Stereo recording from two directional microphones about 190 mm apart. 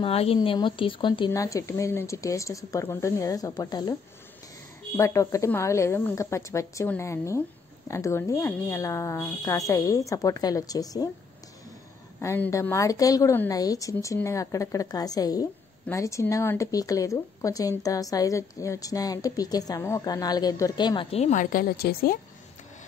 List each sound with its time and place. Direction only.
0.0 s speech: 30° left (ahead or behind)
4.9 s speech: 15° left (ahead or behind)
12.2 s a woman's voice: 15° left (ahead or behind); by 22.2 s 55° left (ahead or behind)